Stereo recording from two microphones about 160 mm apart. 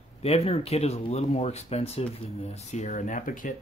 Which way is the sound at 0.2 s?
40° left (ahead or behind).